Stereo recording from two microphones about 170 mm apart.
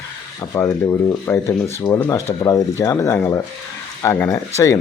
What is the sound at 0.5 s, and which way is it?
Speech, 10° left (ahead or behind).